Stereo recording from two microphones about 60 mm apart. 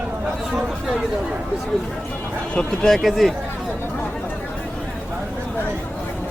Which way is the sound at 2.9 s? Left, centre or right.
Centre.